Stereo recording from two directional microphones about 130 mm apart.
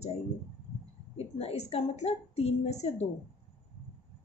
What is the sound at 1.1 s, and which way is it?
A woman's voice, 50° left (ahead or behind).